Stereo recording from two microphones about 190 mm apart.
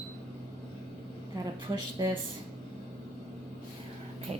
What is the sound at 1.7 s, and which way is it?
Speech, 25° right (ahead or behind).